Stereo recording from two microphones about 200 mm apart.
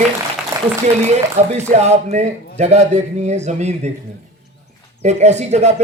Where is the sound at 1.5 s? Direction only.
35° right (ahead or behind).